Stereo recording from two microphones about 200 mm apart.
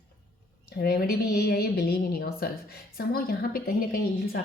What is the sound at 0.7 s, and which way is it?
Speech, 50° left (ahead or behind).